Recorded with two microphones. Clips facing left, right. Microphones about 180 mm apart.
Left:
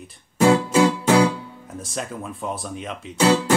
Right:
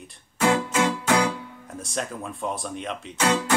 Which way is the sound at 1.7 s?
Centre (ahead or behind).